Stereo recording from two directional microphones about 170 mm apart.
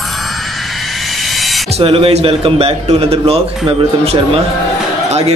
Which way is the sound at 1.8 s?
35° right (ahead or behind).